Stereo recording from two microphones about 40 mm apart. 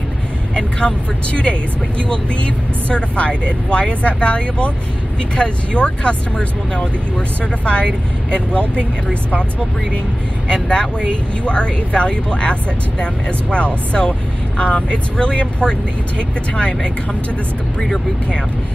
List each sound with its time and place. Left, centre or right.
0.6 s speech: left
10.5 s speech: left